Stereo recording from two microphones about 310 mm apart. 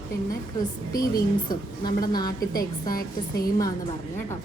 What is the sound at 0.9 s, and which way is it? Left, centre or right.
A woman's voice, centre.